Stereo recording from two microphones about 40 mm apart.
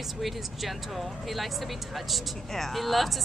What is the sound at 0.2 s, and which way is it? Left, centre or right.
Speech, centre.